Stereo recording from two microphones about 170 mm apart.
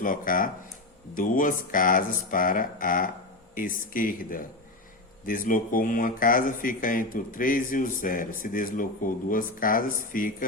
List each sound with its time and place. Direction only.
0.0 s speech: 50° left (ahead or behind)